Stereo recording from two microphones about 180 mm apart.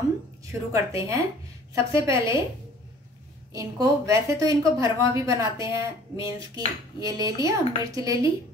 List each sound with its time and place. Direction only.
0.5 s a woman's voice: 15° right (ahead or behind)
3.5 s speech: 20° right (ahead or behind)